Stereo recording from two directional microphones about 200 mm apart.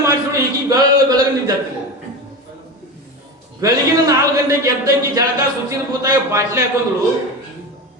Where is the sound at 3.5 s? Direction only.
15° right (ahead or behind).